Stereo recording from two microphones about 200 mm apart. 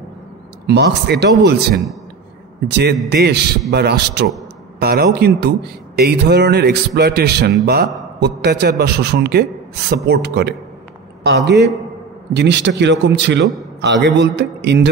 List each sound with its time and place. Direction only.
0.7 s speech: 55° right (ahead or behind)